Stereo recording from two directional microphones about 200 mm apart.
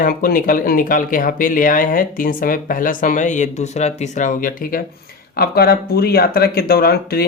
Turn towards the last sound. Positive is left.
turn(degrees=50)  # may be behind; listen again after turning